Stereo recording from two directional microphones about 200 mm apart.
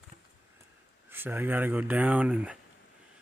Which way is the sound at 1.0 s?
10° right (ahead or behind).